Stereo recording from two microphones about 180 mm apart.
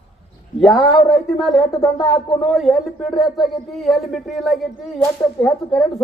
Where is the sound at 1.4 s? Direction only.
Centre (ahead or behind).